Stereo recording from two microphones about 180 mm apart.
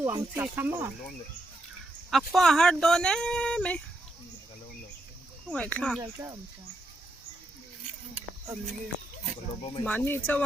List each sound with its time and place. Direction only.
0.0 s speech: 10° right (ahead or behind)
2.0 s speech: centre (ahead or behind)
5.5 s speech: 5° left (ahead or behind)
6.0 s speech: 15° right (ahead or behind)
9.8 s speech: 10° left (ahead or behind)